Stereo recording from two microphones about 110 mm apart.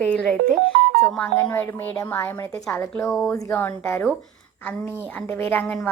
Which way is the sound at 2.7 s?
20° left (ahead or behind).